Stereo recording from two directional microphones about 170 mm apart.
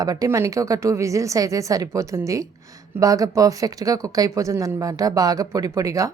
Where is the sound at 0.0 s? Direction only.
20° right (ahead or behind).